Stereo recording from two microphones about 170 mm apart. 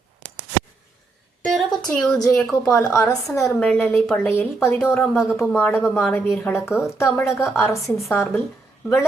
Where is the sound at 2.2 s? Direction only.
15° left (ahead or behind).